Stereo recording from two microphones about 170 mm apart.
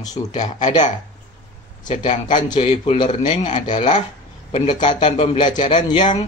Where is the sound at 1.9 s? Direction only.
40° left (ahead or behind).